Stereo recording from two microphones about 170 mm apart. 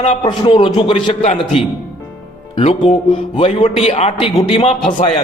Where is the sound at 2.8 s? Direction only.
30° left (ahead or behind).